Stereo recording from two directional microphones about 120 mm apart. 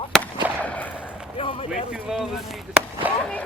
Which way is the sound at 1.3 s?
50° left (ahead or behind).